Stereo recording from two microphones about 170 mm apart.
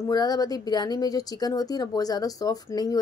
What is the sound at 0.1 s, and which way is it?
Speech, 25° left (ahead or behind).